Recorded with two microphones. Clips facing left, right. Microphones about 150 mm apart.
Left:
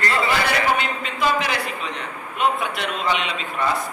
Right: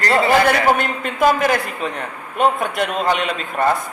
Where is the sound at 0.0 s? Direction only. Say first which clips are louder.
Right 7 dB; 50° right (ahead or behind).